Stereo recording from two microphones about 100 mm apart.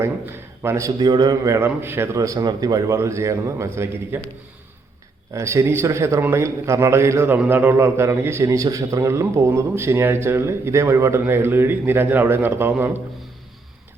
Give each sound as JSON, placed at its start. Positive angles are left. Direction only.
{"t": 0.0, "sound": "a man's voice", "side_deg": -25}
{"t": 0.9, "sound": "a man's voice", "side_deg": -45}
{"t": 1.5, "sound": "speech", "side_deg": -25}
{"t": 4.1, "sound": "a man's voice", "side_deg": -20}
{"t": 5.3, "sound": "a man's voice", "side_deg": -30}